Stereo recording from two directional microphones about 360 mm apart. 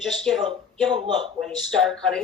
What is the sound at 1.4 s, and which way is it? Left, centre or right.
Speech, centre.